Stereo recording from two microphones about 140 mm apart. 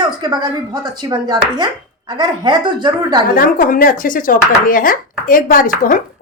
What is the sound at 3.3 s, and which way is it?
Speech, 90° left.